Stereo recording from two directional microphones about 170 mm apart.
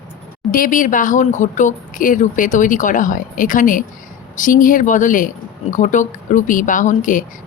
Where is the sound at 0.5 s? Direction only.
55° left (ahead or behind).